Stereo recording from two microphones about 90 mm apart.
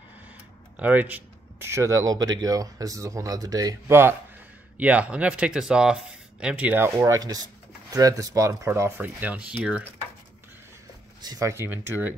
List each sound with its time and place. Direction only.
0.7 s a sound: 15° right (ahead or behind)
1.7 s speech: 35° right (ahead or behind)
3.8 s speech: 25° right (ahead or behind)
4.7 s speech: 15° right (ahead or behind)
7.2 s speech: 45° right (ahead or behind)
8.9 s speech: 20° right (ahead or behind)
11.1 s speech: 50° right (ahead or behind)
11.4 s speech: 30° right (ahead or behind)